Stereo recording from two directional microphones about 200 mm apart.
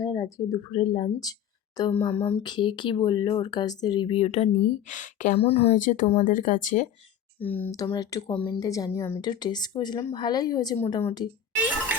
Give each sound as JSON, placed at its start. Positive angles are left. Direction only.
{"t": 0.0, "sound": "a woman's voice", "side_deg": 15}
{"t": 5.7, "sound": "speech", "side_deg": 40}
{"t": 7.3, "sound": "a woman's voice", "side_deg": 10}